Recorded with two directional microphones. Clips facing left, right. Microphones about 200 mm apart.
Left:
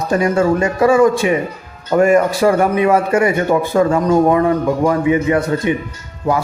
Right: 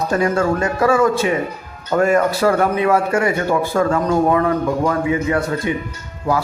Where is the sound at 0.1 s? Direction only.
15° left (ahead or behind).